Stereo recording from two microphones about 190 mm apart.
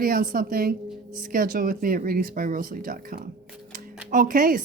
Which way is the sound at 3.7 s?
45° right (ahead or behind).